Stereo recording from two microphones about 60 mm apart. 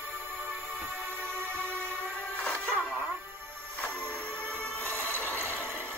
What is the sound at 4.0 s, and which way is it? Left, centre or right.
Music, left.